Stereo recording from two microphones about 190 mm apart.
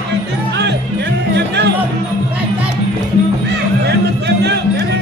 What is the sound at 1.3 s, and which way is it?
Music, 65° right (ahead or behind).